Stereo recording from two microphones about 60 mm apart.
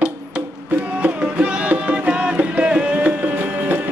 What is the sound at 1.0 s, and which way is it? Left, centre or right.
Music, right.